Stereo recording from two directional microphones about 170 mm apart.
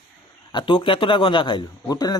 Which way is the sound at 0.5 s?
30° left (ahead or behind).